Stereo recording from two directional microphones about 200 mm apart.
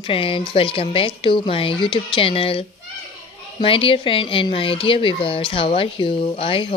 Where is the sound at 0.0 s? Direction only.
25° left (ahead or behind).